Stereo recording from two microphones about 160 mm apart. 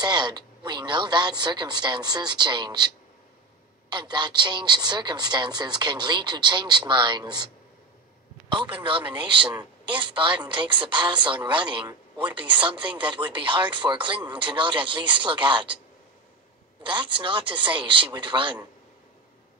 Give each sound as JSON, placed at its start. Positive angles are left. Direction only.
{"t": 0.0, "sound": "a woman's voice", "side_deg": -25}
{"t": 3.9, "sound": "a woman's voice", "side_deg": -30}
{"t": 16.8, "sound": "speech", "side_deg": -30}